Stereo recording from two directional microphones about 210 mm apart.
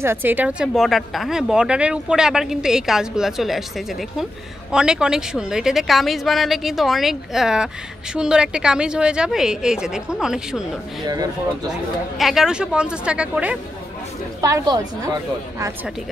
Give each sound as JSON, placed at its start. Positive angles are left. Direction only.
{"t": 0.0, "sound": "speech", "side_deg": -10}
{"t": 12.2, "sound": "a woman's voice", "side_deg": 0}